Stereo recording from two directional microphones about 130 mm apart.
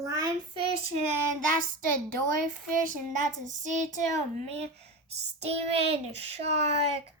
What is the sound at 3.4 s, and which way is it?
Child singing, 70° right (ahead or behind).